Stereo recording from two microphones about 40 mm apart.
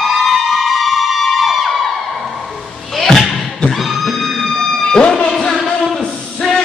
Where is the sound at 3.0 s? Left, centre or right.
Centre.